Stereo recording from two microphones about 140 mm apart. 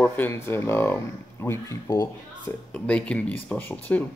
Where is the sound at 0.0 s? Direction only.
15° left (ahead or behind).